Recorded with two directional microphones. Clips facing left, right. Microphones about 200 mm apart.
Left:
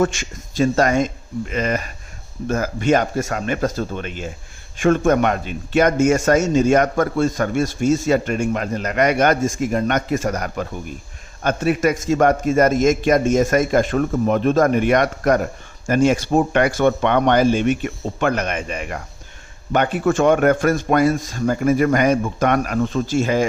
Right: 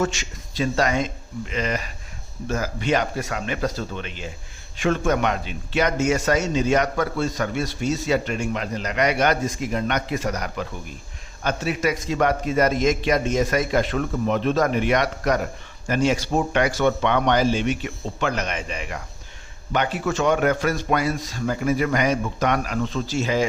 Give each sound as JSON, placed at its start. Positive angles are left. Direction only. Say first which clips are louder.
{"t": 0.0, "sound": "a man's voice", "louder": "left 5 dB", "side_deg": 50}